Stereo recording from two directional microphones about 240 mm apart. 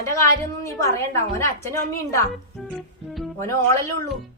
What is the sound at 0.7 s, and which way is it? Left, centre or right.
A woman's voice, centre.